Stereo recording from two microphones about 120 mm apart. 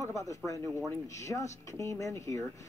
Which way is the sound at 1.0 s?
25° left (ahead or behind).